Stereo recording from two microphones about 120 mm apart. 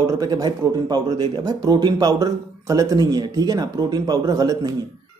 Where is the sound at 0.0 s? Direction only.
35° right (ahead or behind).